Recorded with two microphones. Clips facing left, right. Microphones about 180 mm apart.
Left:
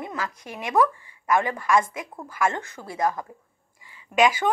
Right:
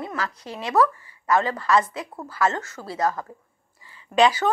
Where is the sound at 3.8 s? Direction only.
15° left (ahead or behind).